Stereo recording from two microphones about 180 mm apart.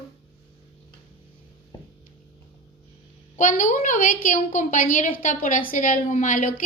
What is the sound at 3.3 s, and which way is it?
A woman's voice, 45° left (ahead or behind).